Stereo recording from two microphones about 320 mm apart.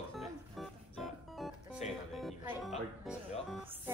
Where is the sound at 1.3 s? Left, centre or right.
Centre.